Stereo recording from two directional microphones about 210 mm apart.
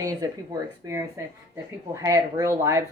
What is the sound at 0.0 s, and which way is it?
Speech, 15° right (ahead or behind).